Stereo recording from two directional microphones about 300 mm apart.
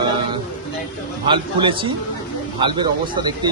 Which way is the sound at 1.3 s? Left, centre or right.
Centre.